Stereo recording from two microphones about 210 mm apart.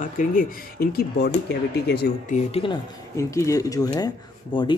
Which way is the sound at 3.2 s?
15° left (ahead or behind).